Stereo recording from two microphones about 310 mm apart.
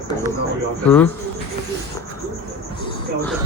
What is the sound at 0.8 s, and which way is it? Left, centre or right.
Speech, centre.